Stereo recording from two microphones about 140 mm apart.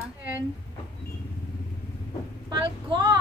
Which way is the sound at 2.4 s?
30° right (ahead or behind).